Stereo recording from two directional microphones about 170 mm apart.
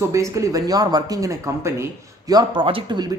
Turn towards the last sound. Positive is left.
turn(degrees=-25)  # may be behind; listen again after turning